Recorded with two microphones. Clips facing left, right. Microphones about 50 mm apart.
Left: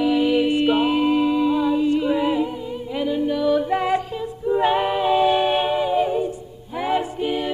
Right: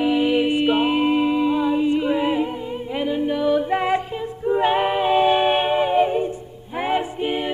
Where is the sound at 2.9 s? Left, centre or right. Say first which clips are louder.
Even; right.